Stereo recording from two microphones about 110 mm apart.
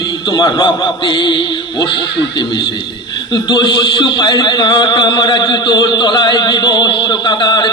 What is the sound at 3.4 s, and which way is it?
Speech, 45° left (ahead or behind).